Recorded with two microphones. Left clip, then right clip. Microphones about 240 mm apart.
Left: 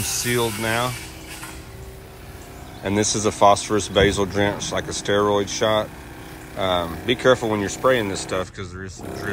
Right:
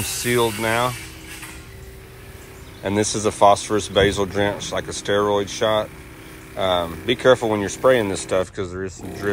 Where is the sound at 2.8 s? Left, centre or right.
Centre.